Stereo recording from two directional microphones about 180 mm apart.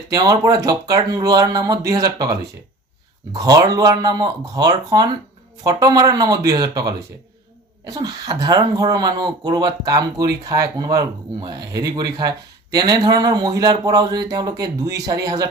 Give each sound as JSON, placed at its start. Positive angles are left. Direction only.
{"t": 0.1, "sound": "speech", "side_deg": -20}